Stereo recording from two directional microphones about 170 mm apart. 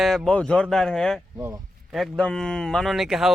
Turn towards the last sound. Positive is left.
turn(degrees=0)  # may be behind; listen again after turning